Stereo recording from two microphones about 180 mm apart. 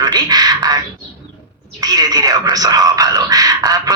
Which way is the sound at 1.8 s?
20° right (ahead or behind).